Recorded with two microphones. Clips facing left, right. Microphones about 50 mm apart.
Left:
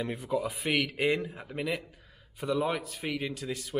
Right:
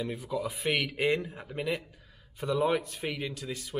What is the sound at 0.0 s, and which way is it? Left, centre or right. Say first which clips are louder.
Speech: left 2 dB; left.